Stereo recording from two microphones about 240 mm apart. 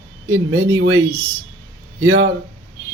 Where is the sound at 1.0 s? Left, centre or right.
Centre.